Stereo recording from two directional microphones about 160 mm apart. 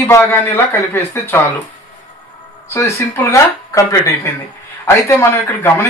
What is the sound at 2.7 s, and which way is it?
Speech, 20° left (ahead or behind).